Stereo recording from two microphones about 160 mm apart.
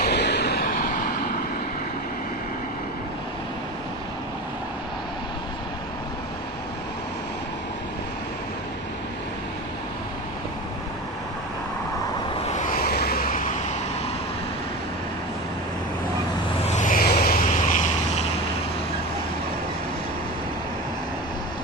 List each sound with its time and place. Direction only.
0.0 s a sound: 90° left; by 1.1 s 60° left (ahead or behind)
12.5 s vehicle: 60° left (ahead or behind)
16.6 s vehicle: 50° left (ahead or behind)